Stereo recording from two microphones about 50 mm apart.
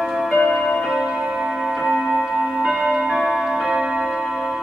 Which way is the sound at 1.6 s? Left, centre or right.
Centre.